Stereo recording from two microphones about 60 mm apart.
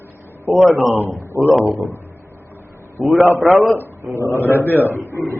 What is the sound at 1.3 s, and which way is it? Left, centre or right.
Speech, right.